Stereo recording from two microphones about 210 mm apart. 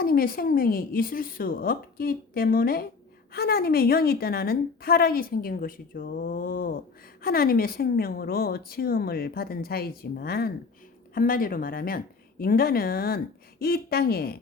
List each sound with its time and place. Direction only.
0.0 s a woman's voice: 45° left (ahead or behind)